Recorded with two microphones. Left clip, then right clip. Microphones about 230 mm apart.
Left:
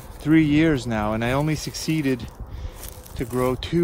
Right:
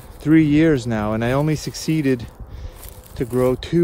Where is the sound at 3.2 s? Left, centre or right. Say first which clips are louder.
Right 5 dB; left.